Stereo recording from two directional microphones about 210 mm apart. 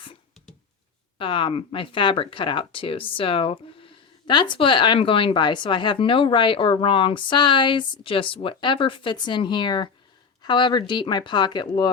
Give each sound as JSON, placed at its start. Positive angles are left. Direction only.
{"t": 1.2, "sound": "speech", "side_deg": 25}